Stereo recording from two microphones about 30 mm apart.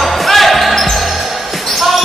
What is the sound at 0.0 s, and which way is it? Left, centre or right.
Basketball bounce, centre.